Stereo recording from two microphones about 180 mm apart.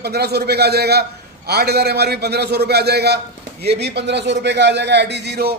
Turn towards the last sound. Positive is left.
turn(degrees=-65)  # may be behind; listen again after turning